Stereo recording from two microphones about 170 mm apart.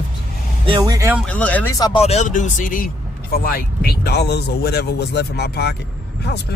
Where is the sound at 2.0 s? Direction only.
40° left (ahead or behind).